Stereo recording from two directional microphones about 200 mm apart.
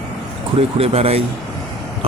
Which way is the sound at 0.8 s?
30° right (ahead or behind).